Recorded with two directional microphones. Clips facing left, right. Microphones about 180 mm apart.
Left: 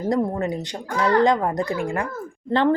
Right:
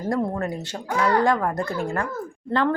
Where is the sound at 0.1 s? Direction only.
20° left (ahead or behind).